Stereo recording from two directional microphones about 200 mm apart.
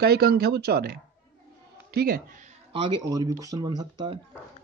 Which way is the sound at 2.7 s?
25° right (ahead or behind).